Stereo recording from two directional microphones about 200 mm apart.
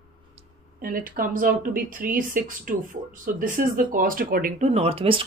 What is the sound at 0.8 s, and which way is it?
Speech, 45° right (ahead or behind).